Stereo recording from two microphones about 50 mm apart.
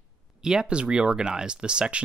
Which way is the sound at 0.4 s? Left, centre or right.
Centre.